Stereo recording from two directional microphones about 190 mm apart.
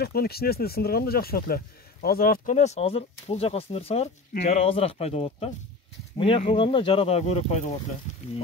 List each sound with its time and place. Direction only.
0.0 s speech: 55° left (ahead or behind); by 7.7 s 35° left (ahead or behind)